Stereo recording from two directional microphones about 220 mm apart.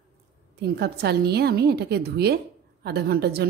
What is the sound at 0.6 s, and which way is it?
A woman's voice, 45° right (ahead or behind).